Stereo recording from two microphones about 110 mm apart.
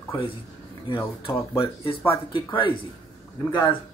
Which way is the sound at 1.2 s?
55° left (ahead or behind).